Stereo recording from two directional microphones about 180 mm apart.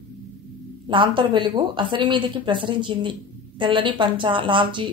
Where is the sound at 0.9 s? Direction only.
25° right (ahead or behind).